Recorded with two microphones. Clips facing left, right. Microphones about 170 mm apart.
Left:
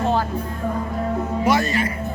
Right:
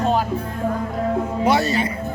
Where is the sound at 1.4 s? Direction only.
30° right (ahead or behind).